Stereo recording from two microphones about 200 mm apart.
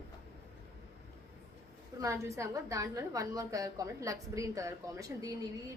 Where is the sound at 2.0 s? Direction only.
15° right (ahead or behind).